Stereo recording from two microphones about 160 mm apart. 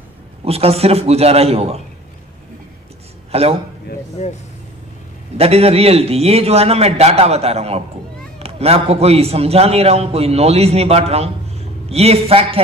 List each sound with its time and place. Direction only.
0.5 s a man's voice: 40° right (ahead or behind)
3.3 s a man's voice: 40° right (ahead or behind)
4.2 s speech: 45° left (ahead or behind)
5.4 s a man's voice: 40° right (ahead or behind)